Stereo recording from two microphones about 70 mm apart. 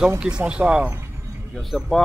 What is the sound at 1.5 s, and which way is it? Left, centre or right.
Speech, centre.